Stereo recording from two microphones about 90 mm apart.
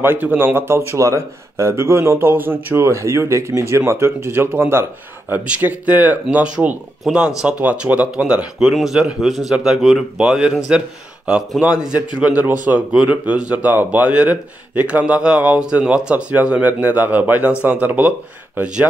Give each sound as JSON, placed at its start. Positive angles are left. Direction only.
{"t": 0.0, "sound": "a man's voice", "side_deg": -20}